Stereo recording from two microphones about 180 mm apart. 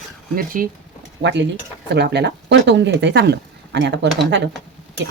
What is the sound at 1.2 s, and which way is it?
Speech, 75° right (ahead or behind).